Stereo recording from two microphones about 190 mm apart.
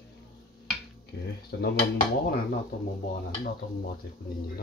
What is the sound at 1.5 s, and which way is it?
Dishes, 60° left (ahead or behind).